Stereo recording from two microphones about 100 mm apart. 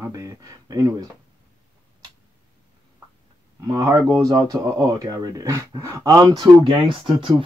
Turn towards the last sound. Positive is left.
turn(degrees=-60)  # may be behind; listen again after turning